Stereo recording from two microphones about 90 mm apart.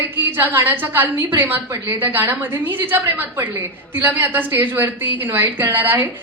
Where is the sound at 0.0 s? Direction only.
20° right (ahead or behind).